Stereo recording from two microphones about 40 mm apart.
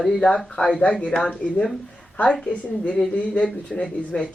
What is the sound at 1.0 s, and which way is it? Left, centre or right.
Speech, left.